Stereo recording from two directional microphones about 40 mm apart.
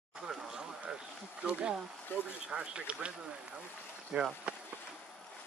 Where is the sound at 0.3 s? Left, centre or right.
Centre.